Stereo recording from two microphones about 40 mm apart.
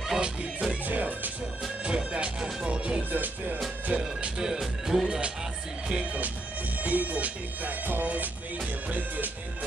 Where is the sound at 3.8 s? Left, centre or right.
Right.